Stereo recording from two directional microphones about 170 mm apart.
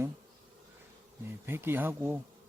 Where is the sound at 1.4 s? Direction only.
15° right (ahead or behind).